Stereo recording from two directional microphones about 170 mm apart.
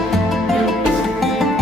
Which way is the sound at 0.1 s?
Centre (ahead or behind).